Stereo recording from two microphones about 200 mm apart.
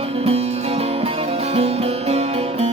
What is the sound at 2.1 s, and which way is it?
Music, 30° right (ahead or behind).